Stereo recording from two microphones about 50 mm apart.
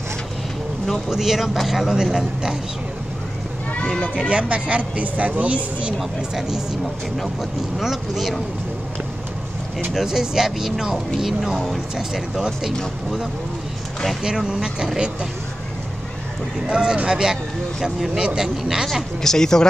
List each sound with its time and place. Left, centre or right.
0.8 s speech: centre
1.1 s speech: centre
4.3 s speech: right
5.9 s speech: centre
7.8 s speech: centre
9.9 s speech: centre
14.2 s speech: centre
16.6 s speech: centre
19.2 s speech: centre